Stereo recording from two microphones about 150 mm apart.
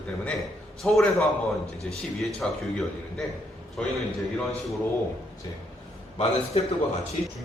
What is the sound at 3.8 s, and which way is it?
Speech, 5° left (ahead or behind).